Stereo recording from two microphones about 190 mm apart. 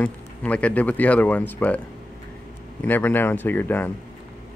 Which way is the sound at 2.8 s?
10° left (ahead or behind).